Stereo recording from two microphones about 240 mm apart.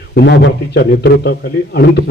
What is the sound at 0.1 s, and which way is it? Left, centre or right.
A man's voice, left.